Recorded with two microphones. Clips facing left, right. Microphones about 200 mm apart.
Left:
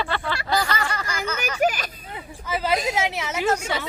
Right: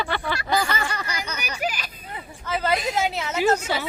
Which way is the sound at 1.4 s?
45° left (ahead or behind).